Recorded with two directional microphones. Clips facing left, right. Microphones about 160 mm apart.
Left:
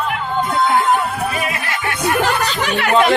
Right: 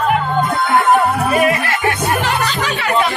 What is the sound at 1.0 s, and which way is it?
Music, 60° right (ahead or behind).